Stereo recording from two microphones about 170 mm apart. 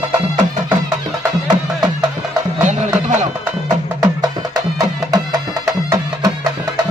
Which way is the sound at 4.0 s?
20° right (ahead or behind).